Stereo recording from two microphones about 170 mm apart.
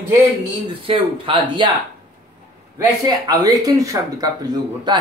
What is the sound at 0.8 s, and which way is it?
Speech, 30° right (ahead or behind).